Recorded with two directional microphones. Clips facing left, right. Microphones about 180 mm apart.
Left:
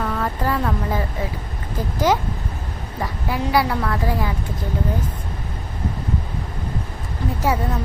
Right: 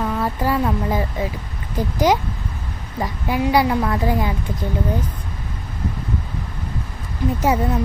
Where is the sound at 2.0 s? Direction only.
15° right (ahead or behind).